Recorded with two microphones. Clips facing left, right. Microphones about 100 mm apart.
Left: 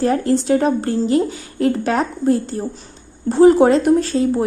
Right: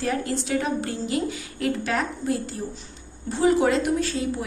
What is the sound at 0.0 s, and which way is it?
Speech, 40° left (ahead or behind).